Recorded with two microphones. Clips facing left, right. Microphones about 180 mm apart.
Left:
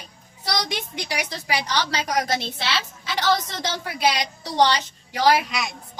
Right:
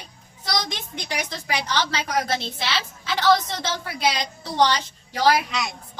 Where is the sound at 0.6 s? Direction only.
10° left (ahead or behind).